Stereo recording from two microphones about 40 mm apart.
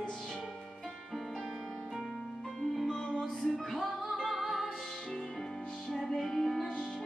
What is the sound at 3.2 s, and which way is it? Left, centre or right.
Music, centre.